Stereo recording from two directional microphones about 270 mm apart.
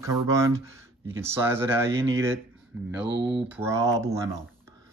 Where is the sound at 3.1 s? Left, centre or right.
Right.